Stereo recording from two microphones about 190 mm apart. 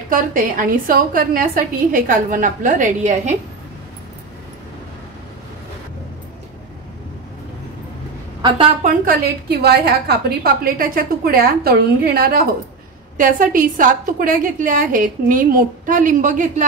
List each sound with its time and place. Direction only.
0.1 s a woman's voice: 45° right (ahead or behind)
8.8 s a woman's voice: 50° right (ahead or behind)